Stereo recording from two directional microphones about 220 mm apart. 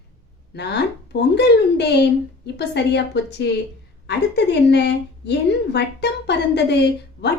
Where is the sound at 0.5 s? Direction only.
50° left (ahead or behind).